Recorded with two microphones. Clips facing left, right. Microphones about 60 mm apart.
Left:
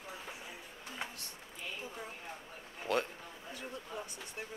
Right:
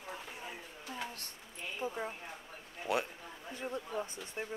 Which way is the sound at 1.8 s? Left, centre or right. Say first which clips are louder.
Right 7 dB; right.